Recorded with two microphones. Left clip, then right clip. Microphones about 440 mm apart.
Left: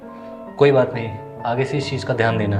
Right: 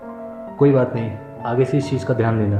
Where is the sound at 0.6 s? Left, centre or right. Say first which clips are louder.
Left 2 dB; left.